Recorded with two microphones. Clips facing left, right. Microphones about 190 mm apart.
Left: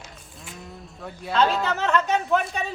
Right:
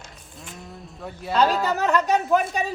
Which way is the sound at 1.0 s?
5° right (ahead or behind).